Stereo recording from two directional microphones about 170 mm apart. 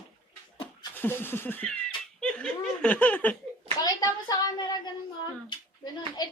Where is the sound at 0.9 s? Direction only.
10° left (ahead or behind).